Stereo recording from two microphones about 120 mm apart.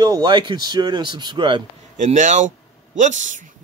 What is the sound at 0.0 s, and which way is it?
Speech, 35° right (ahead or behind).